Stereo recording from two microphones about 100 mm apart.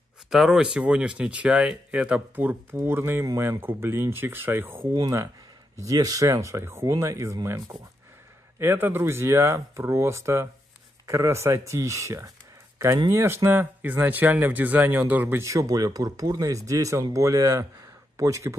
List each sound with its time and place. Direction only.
0.3 s speech: 5° right (ahead or behind); by 4.8 s 20° right (ahead or behind)
5.8 s speech: 35° right (ahead or behind)
8.5 s speech: 25° right (ahead or behind)